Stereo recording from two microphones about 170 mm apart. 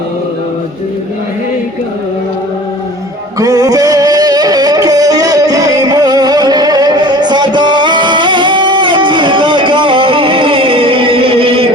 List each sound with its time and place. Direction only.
3.3 s music: 20° right (ahead or behind)